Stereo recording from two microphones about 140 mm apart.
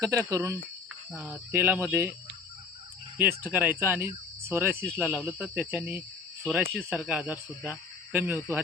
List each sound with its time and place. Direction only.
0.0 s speech: 25° right (ahead or behind)
3.2 s speech: 15° right (ahead or behind)